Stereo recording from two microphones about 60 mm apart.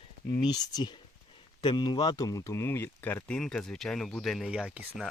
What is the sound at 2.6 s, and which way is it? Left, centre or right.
Speech, left.